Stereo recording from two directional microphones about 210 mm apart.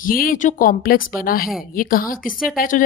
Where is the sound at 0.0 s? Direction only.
45° left (ahead or behind).